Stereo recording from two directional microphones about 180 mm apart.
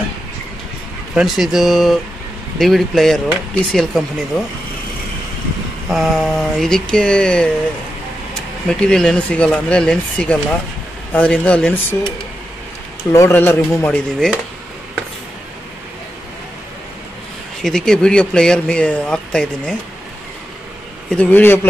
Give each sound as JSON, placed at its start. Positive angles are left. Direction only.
{"t": 1.1, "sound": "speech", "side_deg": 0}
{"t": 5.9, "sound": "speech", "side_deg": 0}
{"t": 8.6, "sound": "speech", "side_deg": 5}
{"t": 13.1, "sound": "speech", "side_deg": 15}
{"t": 17.6, "sound": "speech", "side_deg": 5}
{"t": 21.1, "sound": "speech", "side_deg": 10}